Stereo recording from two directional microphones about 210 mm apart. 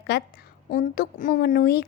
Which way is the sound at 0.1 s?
45° left (ahead or behind).